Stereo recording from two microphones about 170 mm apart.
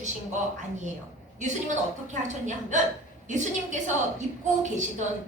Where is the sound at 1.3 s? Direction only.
45° right (ahead or behind).